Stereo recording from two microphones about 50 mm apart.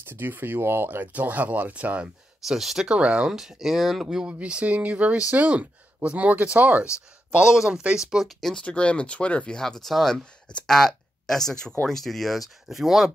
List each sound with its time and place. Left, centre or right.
0.1 s speech: right
2.4 s speech: centre
2.9 s speech: right
3.3 s speech: centre
4.2 s speech: right
7.2 s speech: centre
8.4 s speech: centre
8.6 s speech: left
9.6 s speech: centre